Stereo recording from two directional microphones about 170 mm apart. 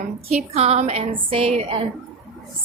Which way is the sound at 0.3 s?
40° right (ahead or behind).